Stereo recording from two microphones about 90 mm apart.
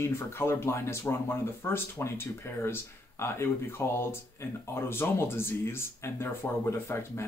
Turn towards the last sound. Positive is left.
turn(degrees=30)  # may be behind; listen again after turning